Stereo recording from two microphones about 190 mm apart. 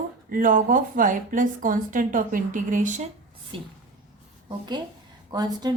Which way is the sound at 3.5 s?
30° right (ahead or behind).